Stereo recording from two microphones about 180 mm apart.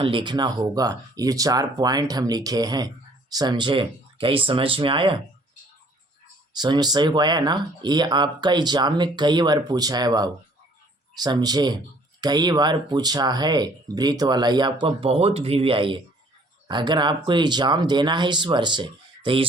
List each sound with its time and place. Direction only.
0.0 s speech: 30° right (ahead or behind)
6.5 s speech: 25° right (ahead or behind)